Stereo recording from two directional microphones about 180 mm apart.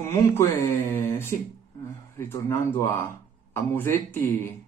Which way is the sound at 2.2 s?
15° left (ahead or behind).